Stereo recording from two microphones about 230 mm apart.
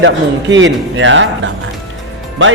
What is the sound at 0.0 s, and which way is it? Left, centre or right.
A man's voice, right.